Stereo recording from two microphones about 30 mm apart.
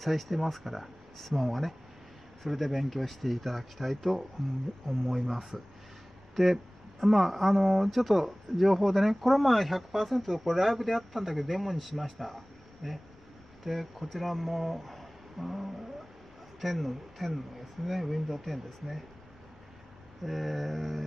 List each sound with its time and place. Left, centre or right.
0.0 s speech: centre
14.8 s a sound: centre
15.3 s speech: centre
20.2 s speech: centre